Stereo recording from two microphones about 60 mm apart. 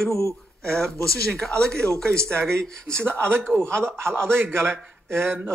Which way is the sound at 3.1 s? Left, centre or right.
Right.